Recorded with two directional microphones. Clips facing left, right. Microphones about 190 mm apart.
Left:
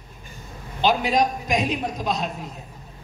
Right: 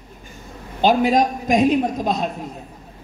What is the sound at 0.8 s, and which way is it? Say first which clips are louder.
Speech: right 4 dB; 50° right (ahead or behind).